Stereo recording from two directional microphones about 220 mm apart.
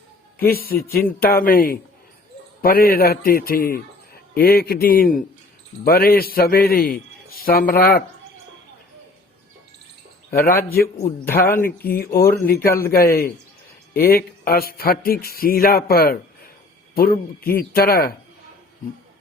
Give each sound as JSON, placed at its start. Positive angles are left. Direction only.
{"t": 0.3, "sound": "a man's voice", "side_deg": 45}
{"t": 10.4, "sound": "a man's voice", "side_deg": 40}